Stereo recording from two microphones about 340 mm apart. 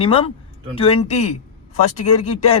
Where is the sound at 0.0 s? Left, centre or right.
Centre.